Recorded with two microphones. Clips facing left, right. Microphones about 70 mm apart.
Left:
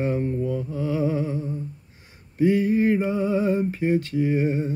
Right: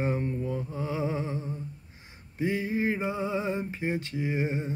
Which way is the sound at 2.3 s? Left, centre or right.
Centre.